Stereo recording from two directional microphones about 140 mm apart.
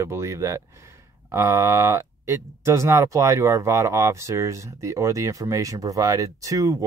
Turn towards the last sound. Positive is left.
turn(degrees=-25)  # may be behind; listen again after turning